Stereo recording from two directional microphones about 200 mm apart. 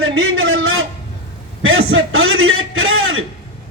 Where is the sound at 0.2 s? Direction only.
80° right.